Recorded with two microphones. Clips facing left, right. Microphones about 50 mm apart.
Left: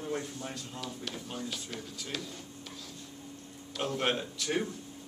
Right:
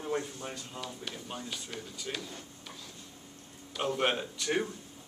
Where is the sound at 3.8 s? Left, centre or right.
Centre.